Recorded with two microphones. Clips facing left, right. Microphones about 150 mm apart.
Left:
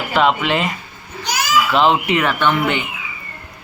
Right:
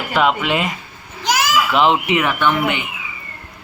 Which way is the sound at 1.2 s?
90° right.